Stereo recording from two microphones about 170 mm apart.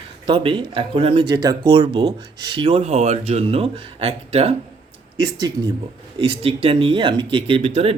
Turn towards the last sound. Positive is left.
turn(degrees=-35)  # may be behind; listen again after turning